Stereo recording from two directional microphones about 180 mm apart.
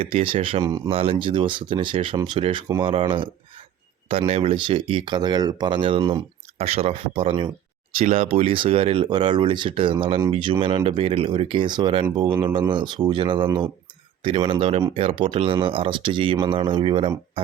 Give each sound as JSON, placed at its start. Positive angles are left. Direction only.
{"t": 0.0, "sound": "speech", "side_deg": -30}
{"t": 4.3, "sound": "speech", "side_deg": -30}